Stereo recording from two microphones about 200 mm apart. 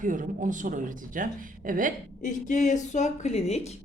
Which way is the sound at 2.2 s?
40° left (ahead or behind).